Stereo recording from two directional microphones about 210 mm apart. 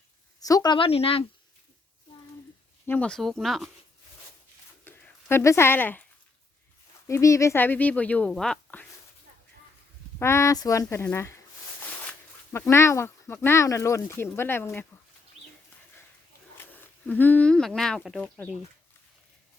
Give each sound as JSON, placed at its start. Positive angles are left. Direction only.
{"t": 0.3, "sound": "a woman's voice", "side_deg": 15}
{"t": 2.8, "sound": "speech", "side_deg": 10}
{"t": 4.9, "sound": "a sound", "side_deg": 10}
{"t": 7.1, "sound": "speech", "side_deg": 15}
{"t": 10.2, "sound": "speech", "side_deg": 10}
{"t": 12.5, "sound": "speech", "side_deg": 15}
{"t": 16.7, "sound": "speech", "side_deg": 10}